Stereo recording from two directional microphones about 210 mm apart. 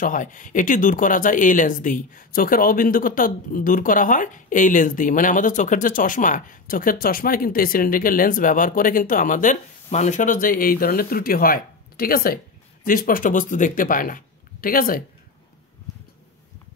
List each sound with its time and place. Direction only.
0.0 s speech: 40° left (ahead or behind)